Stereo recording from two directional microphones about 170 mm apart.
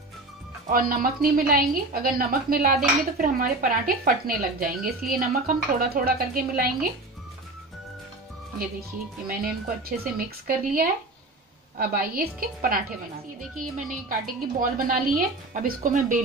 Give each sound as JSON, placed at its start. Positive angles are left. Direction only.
{"t": 0.7, "sound": "a woman's voice", "side_deg": -60}
{"t": 10.1, "sound": "a woman's voice", "side_deg": -60}